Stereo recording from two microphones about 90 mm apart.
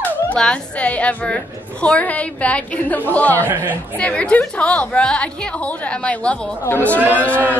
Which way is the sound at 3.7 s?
15° left (ahead or behind).